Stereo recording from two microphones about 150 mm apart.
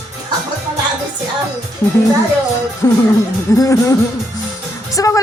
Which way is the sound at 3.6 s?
20° left (ahead or behind).